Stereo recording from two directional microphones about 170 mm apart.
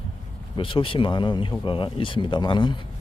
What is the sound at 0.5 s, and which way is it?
Speech, 30° left (ahead or behind).